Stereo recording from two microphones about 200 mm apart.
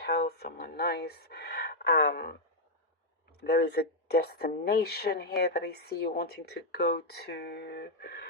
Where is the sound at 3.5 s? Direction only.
55° left (ahead or behind).